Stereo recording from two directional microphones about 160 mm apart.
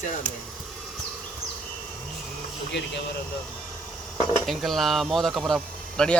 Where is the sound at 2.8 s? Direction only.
90° left.